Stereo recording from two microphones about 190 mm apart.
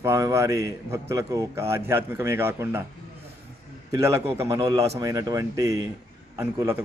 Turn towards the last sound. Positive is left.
turn(degrees=-15)  # may be behind; listen again after turning